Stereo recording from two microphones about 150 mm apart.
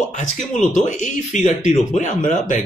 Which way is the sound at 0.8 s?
55° left (ahead or behind).